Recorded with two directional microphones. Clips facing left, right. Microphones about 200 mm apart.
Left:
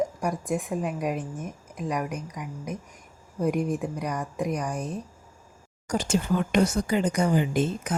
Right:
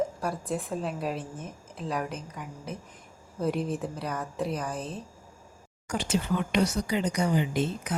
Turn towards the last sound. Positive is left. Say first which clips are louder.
# left 3 dB
turn(degrees=45)  # may be behind; listen again after turning